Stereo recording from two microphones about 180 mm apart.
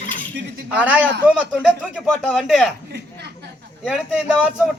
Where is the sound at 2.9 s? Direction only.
70° right (ahead or behind).